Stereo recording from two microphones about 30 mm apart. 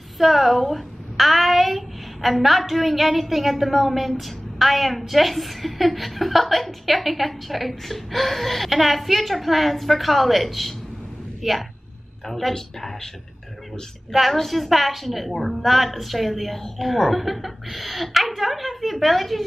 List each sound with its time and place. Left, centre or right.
0.2 s a child's voice: centre
12.3 s speech: centre
14.3 s a woman's voice: centre